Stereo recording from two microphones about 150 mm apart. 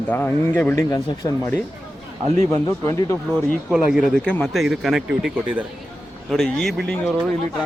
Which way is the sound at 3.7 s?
5° right (ahead or behind).